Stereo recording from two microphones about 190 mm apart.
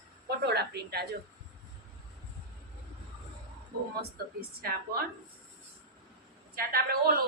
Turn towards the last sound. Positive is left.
turn(degrees=-50)  # may be behind; listen again after turning